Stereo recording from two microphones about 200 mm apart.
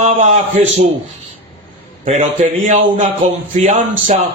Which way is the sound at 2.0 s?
35° right (ahead or behind).